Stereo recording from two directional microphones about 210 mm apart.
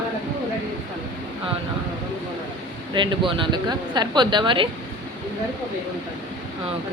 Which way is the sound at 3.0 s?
25° right (ahead or behind).